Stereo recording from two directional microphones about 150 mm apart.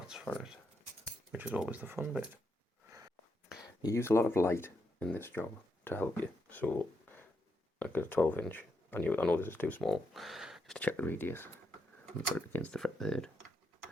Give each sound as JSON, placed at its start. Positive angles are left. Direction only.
{"t": 1.3, "sound": "speech", "side_deg": -10}
{"t": 3.8, "sound": "speech", "side_deg": 20}
{"t": 7.8, "sound": "speech", "side_deg": 15}
{"t": 9.8, "sound": "speech", "side_deg": 0}
{"t": 10.8, "sound": "speech", "side_deg": 10}